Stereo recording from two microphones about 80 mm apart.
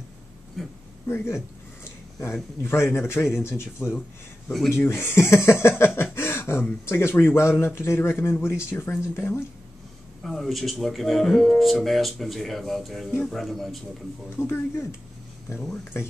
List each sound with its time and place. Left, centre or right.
0.6 s speech: centre
1.0 s a man's voice: left
1.9 s a sound: left
2.6 s a man's voice: left
6.1 s beatboxing: left
6.9 s a man's voice: left
10.2 s speech: centre
14.3 s a man's voice: left